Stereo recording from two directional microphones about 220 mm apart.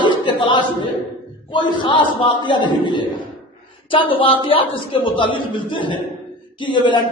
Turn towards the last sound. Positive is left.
turn(degrees=20)  # may be behind; listen again after turning